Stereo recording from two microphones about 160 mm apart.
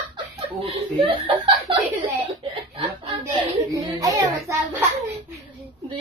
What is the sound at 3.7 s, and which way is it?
Speech, 25° right (ahead or behind).